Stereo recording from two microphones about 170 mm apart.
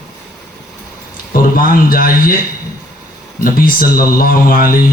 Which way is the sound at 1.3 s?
55° left (ahead or behind).